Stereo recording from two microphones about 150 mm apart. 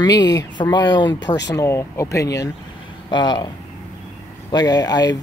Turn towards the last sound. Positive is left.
turn(degrees=25)  # may be behind; listen again after turning